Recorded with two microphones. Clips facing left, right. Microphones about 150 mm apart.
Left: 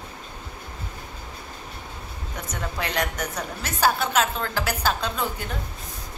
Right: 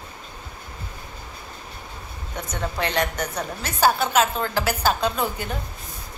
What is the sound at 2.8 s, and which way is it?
A woman's voice, 5° left (ahead or behind).